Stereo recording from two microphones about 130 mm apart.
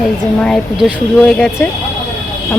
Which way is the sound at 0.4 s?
5° left (ahead or behind).